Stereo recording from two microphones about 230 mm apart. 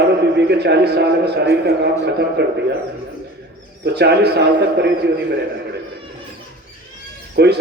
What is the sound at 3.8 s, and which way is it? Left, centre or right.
A man's voice, right.